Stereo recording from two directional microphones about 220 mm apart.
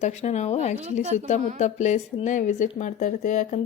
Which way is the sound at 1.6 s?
30° left (ahead or behind).